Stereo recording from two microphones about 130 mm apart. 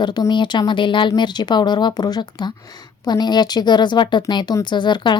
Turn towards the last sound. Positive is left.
turn(degrees=35)  # may be behind; listen again after turning